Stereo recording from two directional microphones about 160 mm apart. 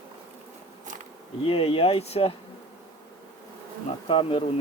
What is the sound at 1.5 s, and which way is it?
Speech, 35° left (ahead or behind).